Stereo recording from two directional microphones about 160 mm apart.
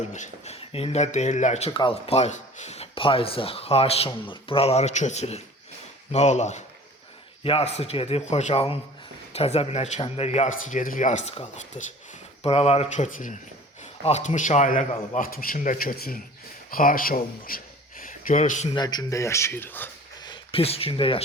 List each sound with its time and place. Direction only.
0.1 s speech: 45° left (ahead or behind)
18.7 s speech: 25° left (ahead or behind)
20.2 s speech: 30° left (ahead or behind)